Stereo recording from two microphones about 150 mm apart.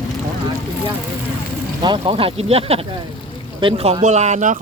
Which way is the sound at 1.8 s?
35° right (ahead or behind).